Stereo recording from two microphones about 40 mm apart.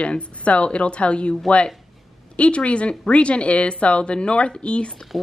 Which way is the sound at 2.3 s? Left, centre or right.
Left.